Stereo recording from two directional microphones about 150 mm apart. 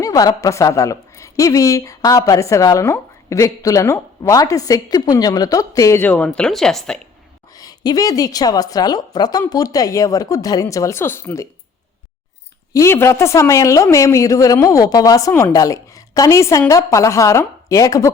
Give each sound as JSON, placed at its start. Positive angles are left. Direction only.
{"t": 0.0, "sound": "a woman's voice", "side_deg": 25}
{"t": 7.5, "sound": "a woman's voice", "side_deg": 25}
{"t": 12.7, "sound": "a woman's voice", "side_deg": 20}